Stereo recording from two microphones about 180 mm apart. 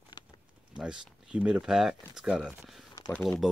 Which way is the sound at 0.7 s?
5° right (ahead or behind).